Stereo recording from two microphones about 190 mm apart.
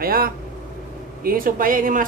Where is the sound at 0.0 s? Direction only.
50° right (ahead or behind).